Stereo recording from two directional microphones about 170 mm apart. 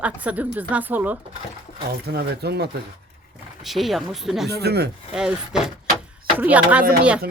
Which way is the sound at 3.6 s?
Centre (ahead or behind).